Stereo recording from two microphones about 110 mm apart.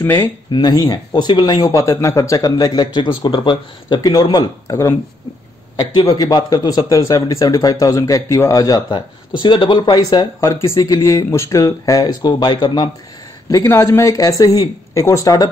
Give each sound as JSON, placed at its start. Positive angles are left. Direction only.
{"t": 0.0, "sound": "speech", "side_deg": 20}
{"t": 0.5, "sound": "speech", "side_deg": 40}
{"t": 8.9, "sound": "speech", "side_deg": 45}
{"t": 10.4, "sound": "speech", "side_deg": 25}
{"t": 13.9, "sound": "speech", "side_deg": 30}